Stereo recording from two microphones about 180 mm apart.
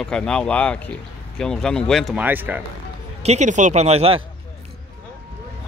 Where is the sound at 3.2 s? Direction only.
40° right (ahead or behind).